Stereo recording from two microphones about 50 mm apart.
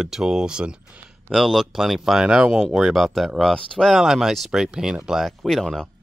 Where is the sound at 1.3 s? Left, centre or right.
Centre.